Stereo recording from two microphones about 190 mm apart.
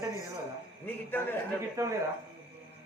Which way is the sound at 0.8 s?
10° left (ahead or behind).